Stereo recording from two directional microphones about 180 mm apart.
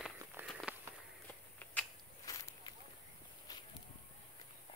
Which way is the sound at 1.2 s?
10° left (ahead or behind).